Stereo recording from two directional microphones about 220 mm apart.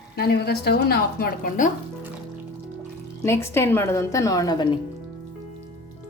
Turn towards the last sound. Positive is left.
turn(degrees=20)  # may be behind; listen again after turning